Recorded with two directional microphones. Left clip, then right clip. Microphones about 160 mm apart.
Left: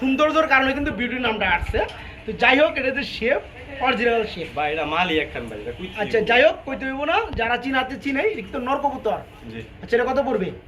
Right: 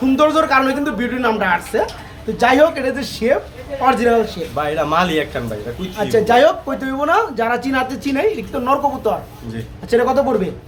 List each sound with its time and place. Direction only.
0.0 s a woman's voice: centre (ahead or behind)
2.7 s a woman's voice: 15° left (ahead or behind)
3.0 s a woman's voice: 10° right (ahead or behind)
4.5 s speech: 55° right (ahead or behind)
6.1 s a woman's voice: 15° right (ahead or behind)